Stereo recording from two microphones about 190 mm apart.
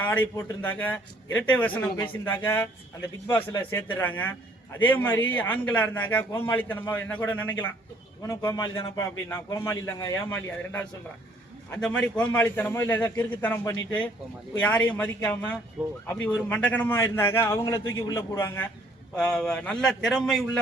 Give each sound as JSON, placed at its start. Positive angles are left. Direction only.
{"t": 0.0, "sound": "a man's voice", "side_deg": 10}
{"t": 15.8, "sound": "speech", "side_deg": -5}
{"t": 16.2, "sound": "a man's voice", "side_deg": 5}